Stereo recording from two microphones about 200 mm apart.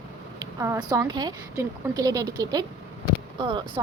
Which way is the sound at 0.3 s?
15° right (ahead or behind).